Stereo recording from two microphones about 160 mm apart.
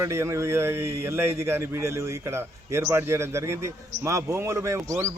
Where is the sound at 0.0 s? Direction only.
15° right (ahead or behind).